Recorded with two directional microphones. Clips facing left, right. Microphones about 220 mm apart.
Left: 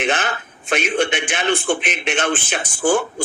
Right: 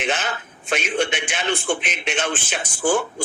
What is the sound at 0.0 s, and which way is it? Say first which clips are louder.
A man's voice: left 3 dB; 55° left (ahead or behind).